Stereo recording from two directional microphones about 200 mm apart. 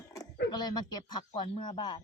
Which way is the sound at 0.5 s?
20° left (ahead or behind).